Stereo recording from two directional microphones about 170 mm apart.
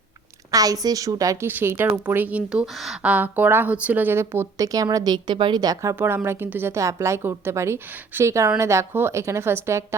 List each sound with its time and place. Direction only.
0.5 s a woman's voice: 20° right (ahead or behind)